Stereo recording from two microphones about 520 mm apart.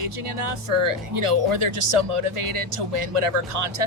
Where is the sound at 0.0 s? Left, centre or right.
Right.